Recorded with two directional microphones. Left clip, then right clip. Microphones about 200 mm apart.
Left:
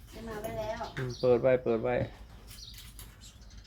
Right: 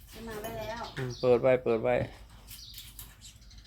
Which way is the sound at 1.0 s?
15° right (ahead or behind).